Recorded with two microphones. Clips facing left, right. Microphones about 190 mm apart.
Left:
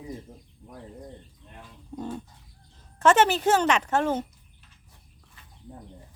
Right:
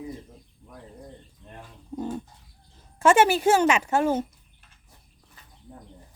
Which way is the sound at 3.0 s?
10° right (ahead or behind).